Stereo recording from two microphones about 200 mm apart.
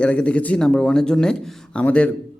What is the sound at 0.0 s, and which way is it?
Speech, 5° left (ahead or behind).